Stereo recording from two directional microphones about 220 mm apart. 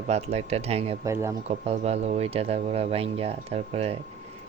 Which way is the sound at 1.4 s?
30° right (ahead or behind).